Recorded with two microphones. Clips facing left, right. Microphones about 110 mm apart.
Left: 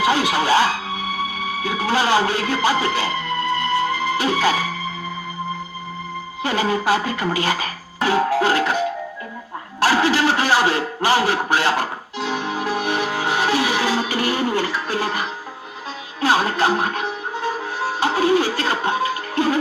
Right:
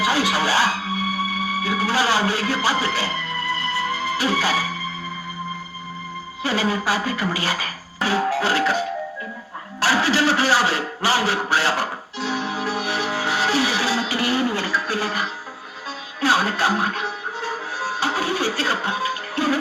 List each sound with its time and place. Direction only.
0.0 s music: 50° left (ahead or behind)
6.4 s speech: 50° left (ahead or behind)
9.8 s a sound: 50° left (ahead or behind)
16.2 s speech: 50° left (ahead or behind)